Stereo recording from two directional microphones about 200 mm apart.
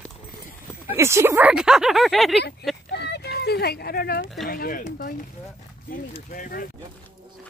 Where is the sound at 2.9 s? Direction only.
55° left (ahead or behind).